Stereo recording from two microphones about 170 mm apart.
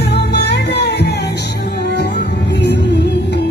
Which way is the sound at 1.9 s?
90° left.